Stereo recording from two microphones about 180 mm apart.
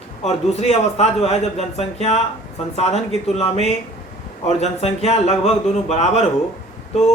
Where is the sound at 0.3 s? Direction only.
35° left (ahead or behind).